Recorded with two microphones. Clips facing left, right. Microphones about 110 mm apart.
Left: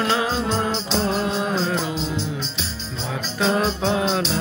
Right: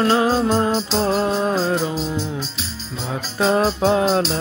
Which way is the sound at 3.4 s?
40° right (ahead or behind).